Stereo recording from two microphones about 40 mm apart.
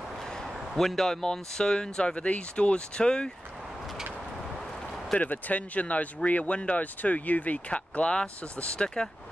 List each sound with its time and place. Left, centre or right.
0.7 s speech: centre
2.1 s speech: left
5.2 s speech: left